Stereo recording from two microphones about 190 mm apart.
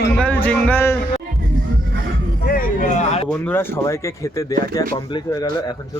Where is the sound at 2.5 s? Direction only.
45° left (ahead or behind).